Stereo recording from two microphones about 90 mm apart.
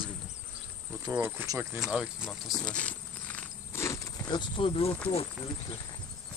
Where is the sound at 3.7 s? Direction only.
35° left (ahead or behind).